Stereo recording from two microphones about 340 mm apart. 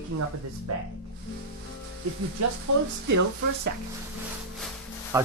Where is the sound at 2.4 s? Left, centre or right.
Right.